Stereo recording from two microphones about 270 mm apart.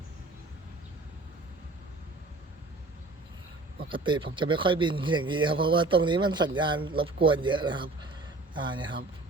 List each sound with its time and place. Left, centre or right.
3.8 s speech: centre